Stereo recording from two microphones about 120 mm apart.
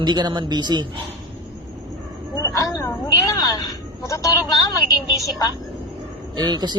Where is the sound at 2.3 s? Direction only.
30° left (ahead or behind).